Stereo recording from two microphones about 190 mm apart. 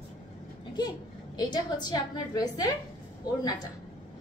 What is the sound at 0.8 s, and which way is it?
A woman's voice, 20° left (ahead or behind).